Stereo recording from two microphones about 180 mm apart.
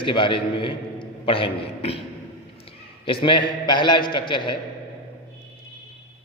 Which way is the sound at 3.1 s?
25° left (ahead or behind).